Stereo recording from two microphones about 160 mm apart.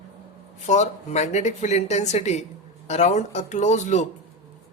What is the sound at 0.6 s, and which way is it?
Speech, 45° left (ahead or behind).